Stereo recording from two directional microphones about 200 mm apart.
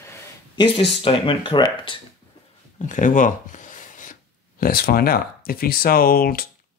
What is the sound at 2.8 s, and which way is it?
Speech, 40° left (ahead or behind).